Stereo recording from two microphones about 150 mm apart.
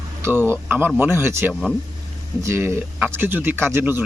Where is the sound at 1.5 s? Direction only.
5° left (ahead or behind).